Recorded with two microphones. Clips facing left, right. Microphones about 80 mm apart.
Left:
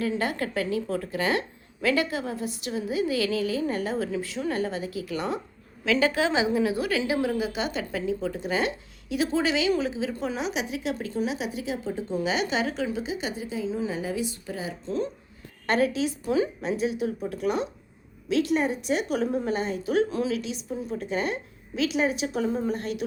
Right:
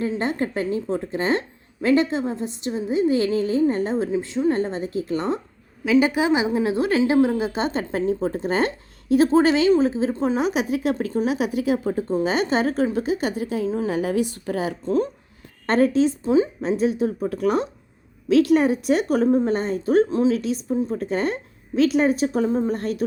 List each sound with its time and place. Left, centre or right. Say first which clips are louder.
0.0 s a woman's voice: right 4 dB; right
5.8 s a woman's voice: right 5 dB; centre; by 10.4 s right
10.4 s a woman's voice: right 7 dB; right
15.6 s a woman's voice: right 6 dB; right